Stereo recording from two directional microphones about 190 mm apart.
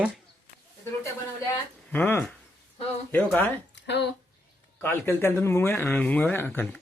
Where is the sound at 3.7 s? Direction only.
65° left (ahead or behind).